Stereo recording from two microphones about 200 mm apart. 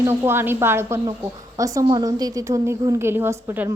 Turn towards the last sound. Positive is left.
turn(degrees=-10)  # may be behind; listen again after turning